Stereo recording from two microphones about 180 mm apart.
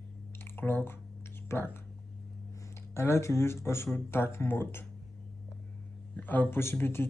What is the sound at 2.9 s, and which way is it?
Speech, 15° left (ahead or behind).